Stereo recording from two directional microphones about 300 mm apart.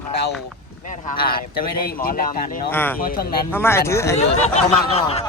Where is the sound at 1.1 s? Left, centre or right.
Left.